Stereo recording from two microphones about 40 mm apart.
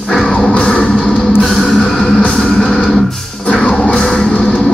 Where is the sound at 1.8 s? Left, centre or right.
Centre.